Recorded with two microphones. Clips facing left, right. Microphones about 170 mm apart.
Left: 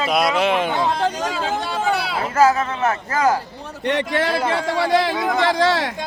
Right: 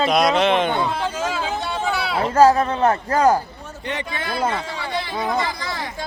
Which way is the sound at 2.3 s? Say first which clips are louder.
Right 2 dB; 35° right (ahead or behind).